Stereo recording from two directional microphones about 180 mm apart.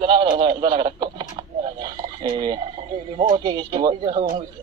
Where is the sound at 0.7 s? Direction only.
25° right (ahead or behind).